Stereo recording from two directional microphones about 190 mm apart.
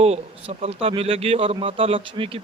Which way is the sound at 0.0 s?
35° right (ahead or behind).